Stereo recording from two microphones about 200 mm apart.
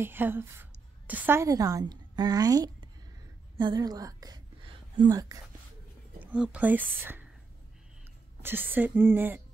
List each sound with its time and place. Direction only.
0.0 s a woman's voice: 10° right (ahead or behind)
6.2 s speech: 5° right (ahead or behind)
8.4 s speech: 10° right (ahead or behind)